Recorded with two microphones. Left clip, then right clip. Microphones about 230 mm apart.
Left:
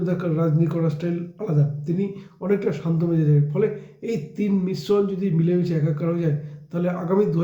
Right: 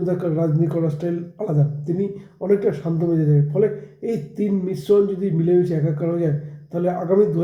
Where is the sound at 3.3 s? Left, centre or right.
Centre.